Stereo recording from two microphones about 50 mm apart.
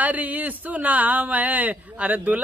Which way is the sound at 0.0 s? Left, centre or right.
Right.